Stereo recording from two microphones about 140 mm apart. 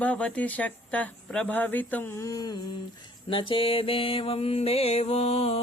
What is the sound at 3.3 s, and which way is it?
Mantra, 35° left (ahead or behind).